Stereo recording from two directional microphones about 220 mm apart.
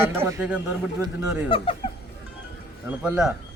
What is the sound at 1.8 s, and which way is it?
Music, 30° left (ahead or behind).